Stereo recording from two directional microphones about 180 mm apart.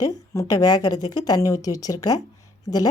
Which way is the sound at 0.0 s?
20° left (ahead or behind).